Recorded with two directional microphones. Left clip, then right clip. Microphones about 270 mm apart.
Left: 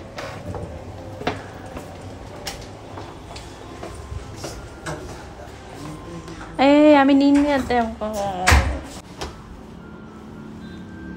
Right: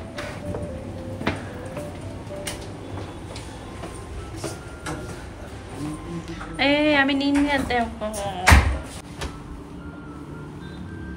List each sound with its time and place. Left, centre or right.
6.5 s speech: left